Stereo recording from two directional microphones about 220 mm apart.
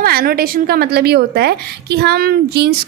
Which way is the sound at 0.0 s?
45° right (ahead or behind).